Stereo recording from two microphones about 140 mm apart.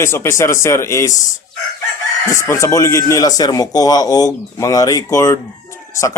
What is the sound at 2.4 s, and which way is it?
Speech, 20° left (ahead or behind).